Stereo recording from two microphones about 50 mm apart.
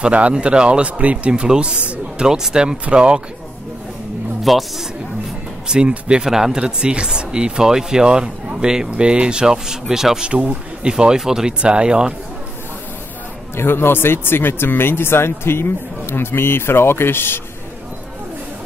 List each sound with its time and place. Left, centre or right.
0.0 s speech: right
4.4 s speech: centre
5.7 s speech: centre
6.6 s speech: right
10.2 s speech: right
10.9 s speech: centre
11.6 s speech: right
13.6 s speech: left